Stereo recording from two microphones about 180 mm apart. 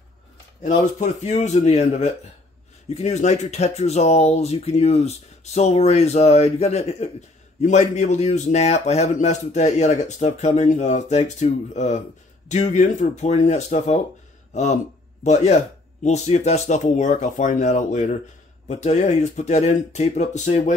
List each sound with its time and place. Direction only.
0.6 s speech: 40° left (ahead or behind)